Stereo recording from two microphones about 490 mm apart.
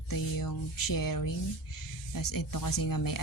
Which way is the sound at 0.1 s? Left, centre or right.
Left.